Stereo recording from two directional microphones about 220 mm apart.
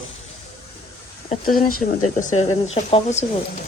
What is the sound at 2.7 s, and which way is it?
Speech, 30° left (ahead or behind).